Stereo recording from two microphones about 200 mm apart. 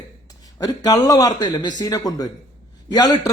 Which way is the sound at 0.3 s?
20° left (ahead or behind).